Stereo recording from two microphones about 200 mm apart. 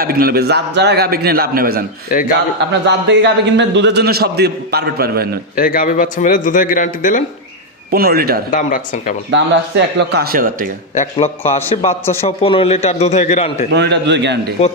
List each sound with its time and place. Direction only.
0.0 s a man's voice: 50° right (ahead or behind)
2.9 s a man's voice: 60° right (ahead or behind)
5.6 s a man's voice: 45° left (ahead or behind)
7.9 s a man's voice: 50° right (ahead or behind)
8.5 s a man's voice: 40° left (ahead or behind)
9.3 s speech: 60° right (ahead or behind); by 10.7 s 45° right (ahead or behind)
11.0 s a man's voice: 30° left (ahead or behind)
12.0 s speech: 10° left (ahead or behind)
12.3 s a man's voice: 30° left (ahead or behind)
13.7 s speech: 60° right (ahead or behind)